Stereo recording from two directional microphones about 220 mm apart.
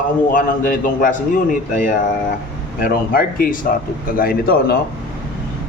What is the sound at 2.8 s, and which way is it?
A man's voice, 40° left (ahead or behind).